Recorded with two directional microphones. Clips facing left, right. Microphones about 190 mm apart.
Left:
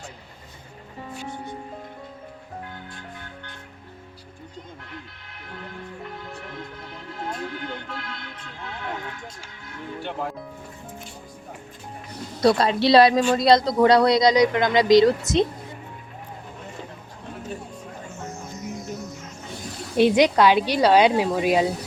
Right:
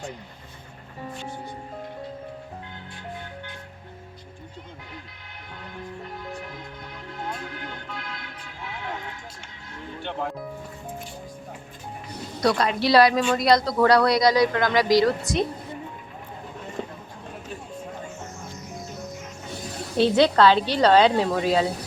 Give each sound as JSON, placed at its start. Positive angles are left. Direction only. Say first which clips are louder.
{"t": 7.9, "sound": "a sound", "louder": "left 1 dB", "side_deg": 0}
{"t": 10.0, "sound": "music", "louder": "even", "side_deg": 5}
{"t": 12.4, "sound": "speech", "louder": "left 3 dB", "side_deg": 30}
{"t": 20.0, "sound": "speech", "louder": "left 1 dB", "side_deg": 15}